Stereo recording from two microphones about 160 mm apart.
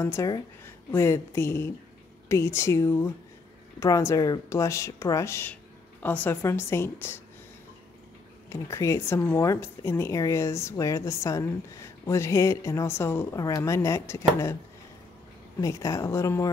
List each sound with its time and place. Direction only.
0.0 s speech: 20° left (ahead or behind)
8.5 s speech: 15° left (ahead or behind)
15.6 s speech: 20° left (ahead or behind)